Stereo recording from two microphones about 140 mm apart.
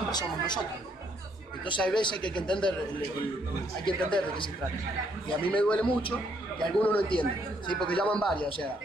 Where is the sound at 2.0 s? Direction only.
35° left (ahead or behind).